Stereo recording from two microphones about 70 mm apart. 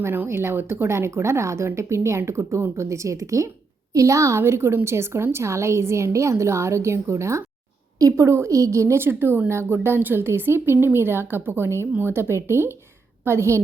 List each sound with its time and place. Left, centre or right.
0.0 s speech: right
9.0 s speech: right